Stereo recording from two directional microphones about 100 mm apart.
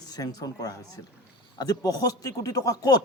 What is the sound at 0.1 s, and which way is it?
A man's voice, 40° left (ahead or behind).